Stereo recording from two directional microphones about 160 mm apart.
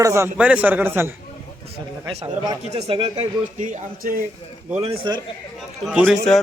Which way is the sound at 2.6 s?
40° right (ahead or behind).